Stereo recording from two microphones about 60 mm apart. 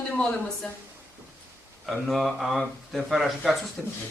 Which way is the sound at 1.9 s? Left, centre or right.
Centre.